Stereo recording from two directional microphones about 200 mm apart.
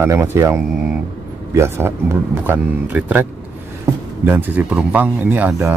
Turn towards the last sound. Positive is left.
turn(degrees=-10)  # may be behind; listen again after turning